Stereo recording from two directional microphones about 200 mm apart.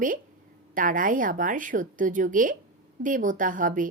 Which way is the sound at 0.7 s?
40° right (ahead or behind).